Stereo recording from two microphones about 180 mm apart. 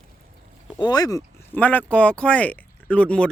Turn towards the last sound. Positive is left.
turn(degrees=5)  # may be behind; listen again after turning